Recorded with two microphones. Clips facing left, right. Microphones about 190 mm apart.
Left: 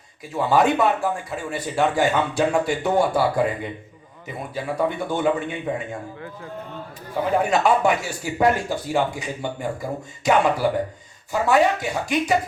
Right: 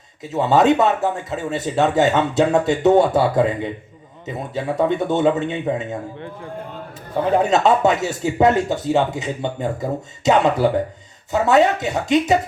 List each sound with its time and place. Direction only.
0.2 s speech: 20° right (ahead or behind)
7.4 s speech: 20° right (ahead or behind)